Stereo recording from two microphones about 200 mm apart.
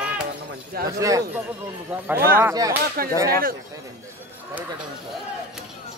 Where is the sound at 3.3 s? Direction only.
45° right (ahead or behind).